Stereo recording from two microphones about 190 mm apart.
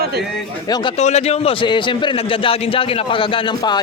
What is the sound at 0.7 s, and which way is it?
Speech, 25° left (ahead or behind).